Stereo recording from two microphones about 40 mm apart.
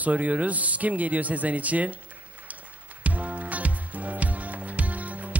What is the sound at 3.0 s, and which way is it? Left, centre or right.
Music, right.